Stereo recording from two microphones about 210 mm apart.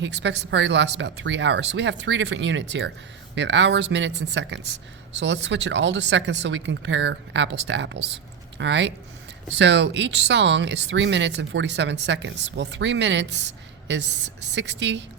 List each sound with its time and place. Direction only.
0.0 s speech: 60° right (ahead or behind)